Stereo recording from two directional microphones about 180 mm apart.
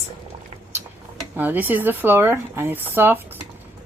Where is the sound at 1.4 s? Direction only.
10° right (ahead or behind).